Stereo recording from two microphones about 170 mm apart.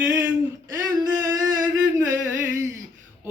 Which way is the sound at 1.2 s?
20° right (ahead or behind).